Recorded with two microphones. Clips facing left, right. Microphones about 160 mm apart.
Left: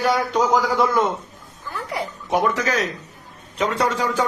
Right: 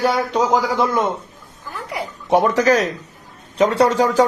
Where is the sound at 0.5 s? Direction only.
25° right (ahead or behind).